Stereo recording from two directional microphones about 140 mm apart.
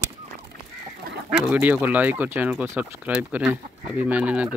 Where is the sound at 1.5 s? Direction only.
10° right (ahead or behind).